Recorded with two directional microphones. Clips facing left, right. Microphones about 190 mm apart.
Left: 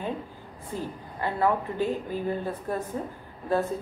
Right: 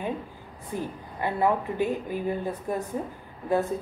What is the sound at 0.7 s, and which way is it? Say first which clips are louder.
A woman's voice: right 1 dB; 15° right (ahead or behind).